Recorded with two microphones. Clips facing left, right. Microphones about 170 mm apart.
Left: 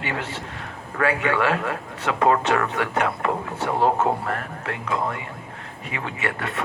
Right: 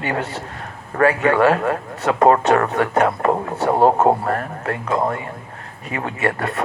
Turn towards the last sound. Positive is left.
turn(degrees=-40)  # may be behind; listen again after turning